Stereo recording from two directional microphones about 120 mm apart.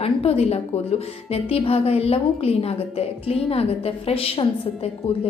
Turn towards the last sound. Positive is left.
turn(degrees=55)  # may be behind; listen again after turning